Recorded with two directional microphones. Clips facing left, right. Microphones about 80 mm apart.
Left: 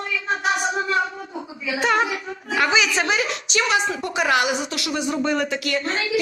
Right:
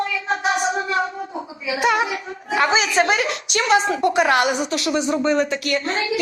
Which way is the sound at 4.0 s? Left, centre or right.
Right.